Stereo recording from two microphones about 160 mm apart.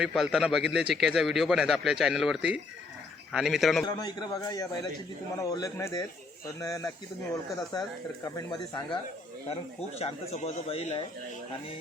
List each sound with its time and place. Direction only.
0.0 s speech: centre (ahead or behind)
3.8 s speech: 25° left (ahead or behind)
10.0 s a man's voice: 40° left (ahead or behind)